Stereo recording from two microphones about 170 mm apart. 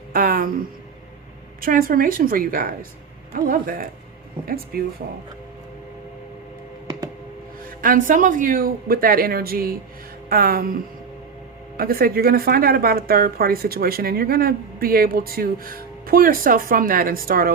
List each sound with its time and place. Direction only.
0.1 s a sound: 60° right (ahead or behind)
1.6 s speech: 55° right (ahead or behind)
7.8 s speech: 55° right (ahead or behind)